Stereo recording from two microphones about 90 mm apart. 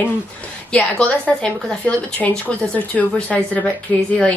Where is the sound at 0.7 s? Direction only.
10° left (ahead or behind).